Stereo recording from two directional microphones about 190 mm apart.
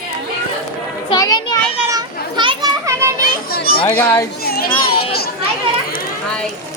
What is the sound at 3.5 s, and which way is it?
Speech, 55° left (ahead or behind).